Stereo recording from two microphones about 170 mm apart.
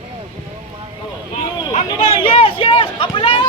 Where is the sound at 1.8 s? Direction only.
30° left (ahead or behind).